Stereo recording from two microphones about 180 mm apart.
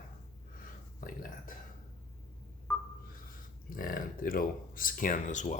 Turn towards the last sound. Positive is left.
turn(degrees=45)  # may be behind; listen again after turning